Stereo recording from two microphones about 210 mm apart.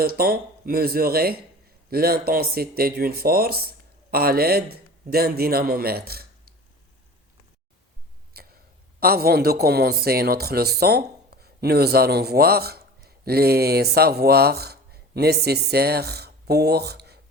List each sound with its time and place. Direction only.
0.0 s speech: 45° right (ahead or behind)
8.3 s a sound: 45° right (ahead or behind)
9.0 s speech: 45° right (ahead or behind)